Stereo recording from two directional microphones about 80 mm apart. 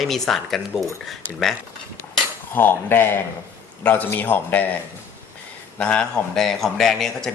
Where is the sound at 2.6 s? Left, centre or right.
Left.